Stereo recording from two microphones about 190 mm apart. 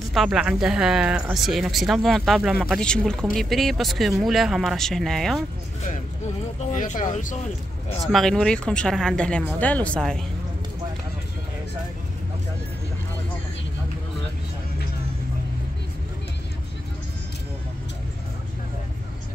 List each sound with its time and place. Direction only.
0.1 s speech: centre (ahead or behind)
6.7 s speech: 45° left (ahead or behind)
8.0 s speech: centre (ahead or behind)